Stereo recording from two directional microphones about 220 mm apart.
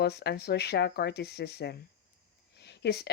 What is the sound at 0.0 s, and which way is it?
Speech, 50° left (ahead or behind).